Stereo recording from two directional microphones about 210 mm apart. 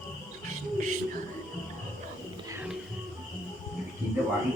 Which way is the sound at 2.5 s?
10° right (ahead or behind).